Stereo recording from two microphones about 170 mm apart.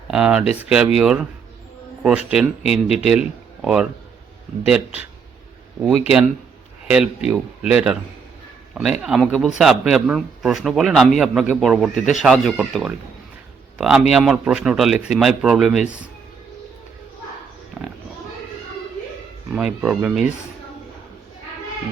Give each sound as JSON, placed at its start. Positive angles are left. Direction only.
{"t": 0.1, "sound": "a man's voice", "side_deg": -5}
{"t": 6.1, "sound": "a man's voice", "side_deg": -5}
{"t": 19.5, "sound": "speech", "side_deg": -5}